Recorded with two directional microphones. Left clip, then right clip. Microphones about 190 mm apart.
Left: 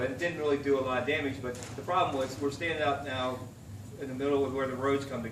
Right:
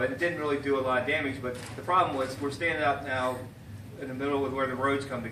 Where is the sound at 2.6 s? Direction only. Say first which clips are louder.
Right 4 dB; centre (ahead or behind).